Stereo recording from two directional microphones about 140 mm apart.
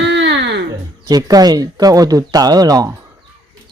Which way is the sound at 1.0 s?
25° right (ahead or behind).